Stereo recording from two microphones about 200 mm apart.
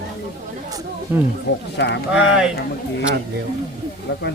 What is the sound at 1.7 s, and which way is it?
Speech, 60° left (ahead or behind).